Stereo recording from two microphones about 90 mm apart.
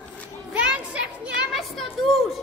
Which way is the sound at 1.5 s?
Centre (ahead or behind).